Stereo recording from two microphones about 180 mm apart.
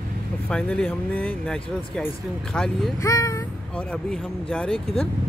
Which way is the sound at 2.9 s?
20° left (ahead or behind).